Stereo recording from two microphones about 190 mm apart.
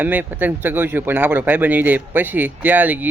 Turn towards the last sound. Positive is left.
turn(degrees=-10)  # may be behind; listen again after turning